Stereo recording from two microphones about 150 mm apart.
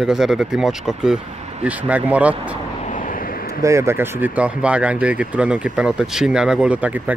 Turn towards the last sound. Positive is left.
turn(degrees=-10)  # may be behind; listen again after turning